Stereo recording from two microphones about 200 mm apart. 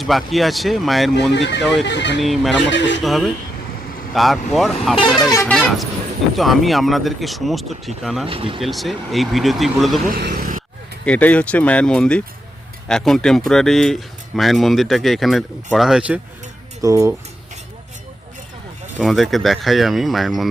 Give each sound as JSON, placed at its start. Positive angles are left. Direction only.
{"t": 0.0, "sound": "speech", "side_deg": 0}
{"t": 1.3, "sound": "speech", "side_deg": 60}
{"t": 2.2, "sound": "speech", "side_deg": 0}
{"t": 2.6, "sound": "speech", "side_deg": 65}
{"t": 3.0, "sound": "speech", "side_deg": 0}
{"t": 5.3, "sound": "speech", "side_deg": 10}
{"t": 5.5, "sound": "speech", "side_deg": 0}
{"t": 8.3, "sound": "speech", "side_deg": -25}
{"t": 8.6, "sound": "speech", "side_deg": 0}
{"t": 10.1, "sound": "speech", "side_deg": -50}
{"t": 11.0, "sound": "speech", "side_deg": 5}
{"t": 18.9, "sound": "speech", "side_deg": 0}